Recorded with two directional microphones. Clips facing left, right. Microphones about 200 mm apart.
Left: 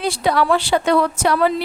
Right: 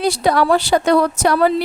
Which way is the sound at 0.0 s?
40° right (ahead or behind).